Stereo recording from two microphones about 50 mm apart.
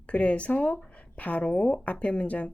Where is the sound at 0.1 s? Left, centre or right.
Left.